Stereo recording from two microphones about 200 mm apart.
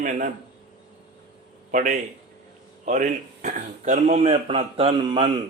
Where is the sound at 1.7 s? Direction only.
40° right (ahead or behind); by 5.2 s 20° right (ahead or behind).